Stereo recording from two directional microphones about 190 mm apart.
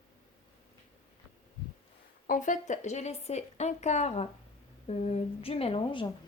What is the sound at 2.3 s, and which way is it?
Speech, 40° left (ahead or behind).